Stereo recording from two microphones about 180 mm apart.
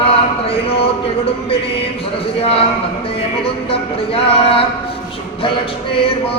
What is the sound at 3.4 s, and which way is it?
Music, 30° left (ahead or behind).